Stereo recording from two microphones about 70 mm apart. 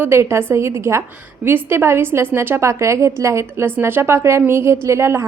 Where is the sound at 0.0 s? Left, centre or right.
Right.